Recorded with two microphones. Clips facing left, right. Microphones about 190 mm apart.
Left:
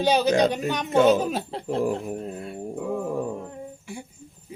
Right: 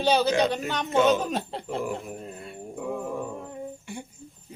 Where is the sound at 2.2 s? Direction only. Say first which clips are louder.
Left 6 dB; centre (ahead or behind).